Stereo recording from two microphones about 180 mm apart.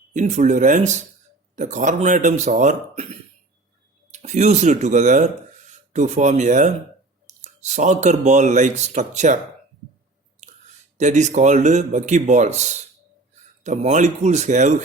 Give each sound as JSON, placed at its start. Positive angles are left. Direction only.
{"t": 0.1, "sound": "speech", "side_deg": -40}
{"t": 10.9, "sound": "speech", "side_deg": -40}